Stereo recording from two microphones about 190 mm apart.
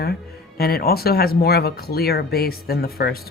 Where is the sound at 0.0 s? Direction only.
55° left (ahead or behind).